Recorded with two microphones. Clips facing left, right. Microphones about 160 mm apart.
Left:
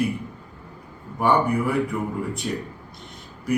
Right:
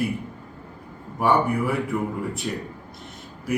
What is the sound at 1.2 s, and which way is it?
A man's voice, centre (ahead or behind).